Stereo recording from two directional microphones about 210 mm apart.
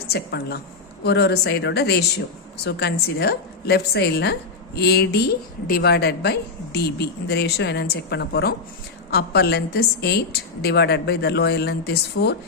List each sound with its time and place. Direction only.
0.1 s a woman's voice: 50° left (ahead or behind)